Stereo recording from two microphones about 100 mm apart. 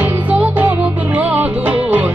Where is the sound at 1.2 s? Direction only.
15° right (ahead or behind).